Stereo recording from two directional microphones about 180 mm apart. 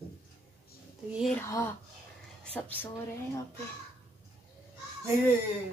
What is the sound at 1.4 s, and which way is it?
Speech, 15° left (ahead or behind).